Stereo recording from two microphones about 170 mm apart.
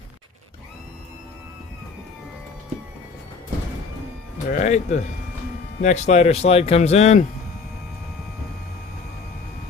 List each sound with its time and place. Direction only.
4.5 s speech: 45° left (ahead or behind)